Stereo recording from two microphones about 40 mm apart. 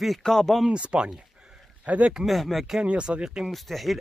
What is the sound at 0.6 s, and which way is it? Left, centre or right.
Speech, right.